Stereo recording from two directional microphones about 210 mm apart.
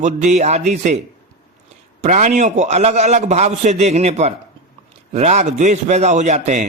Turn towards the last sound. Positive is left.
turn(degrees=-35)  # may be behind; listen again after turning